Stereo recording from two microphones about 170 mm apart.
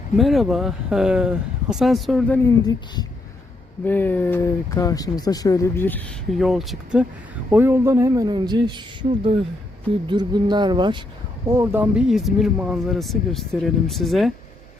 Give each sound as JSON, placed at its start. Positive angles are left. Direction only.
{"t": 0.2, "sound": "speech", "side_deg": 0}
{"t": 2.6, "sound": "speech", "side_deg": 25}
{"t": 3.8, "sound": "speech", "side_deg": 10}